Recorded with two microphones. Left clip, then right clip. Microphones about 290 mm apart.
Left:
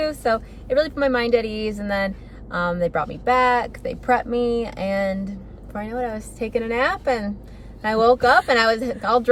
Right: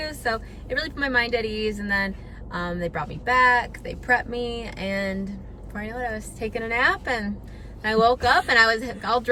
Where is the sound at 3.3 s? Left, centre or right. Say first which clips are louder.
Even; centre.